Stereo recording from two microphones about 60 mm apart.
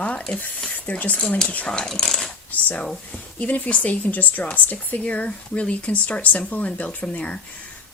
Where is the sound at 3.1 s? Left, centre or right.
Left.